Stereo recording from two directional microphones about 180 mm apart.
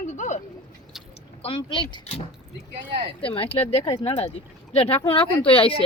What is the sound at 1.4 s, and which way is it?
Speech, 30° left (ahead or behind).